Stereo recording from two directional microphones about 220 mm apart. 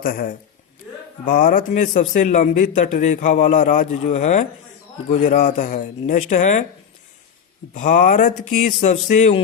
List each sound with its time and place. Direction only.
0.0 s a man's voice: 40° left (ahead or behind)
7.7 s a man's voice: 35° left (ahead or behind)